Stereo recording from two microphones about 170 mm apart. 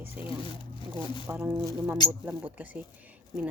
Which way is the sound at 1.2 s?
15° right (ahead or behind).